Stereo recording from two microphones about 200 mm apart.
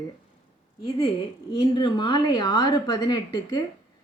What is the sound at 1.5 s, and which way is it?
A woman's voice, 20° left (ahead or behind).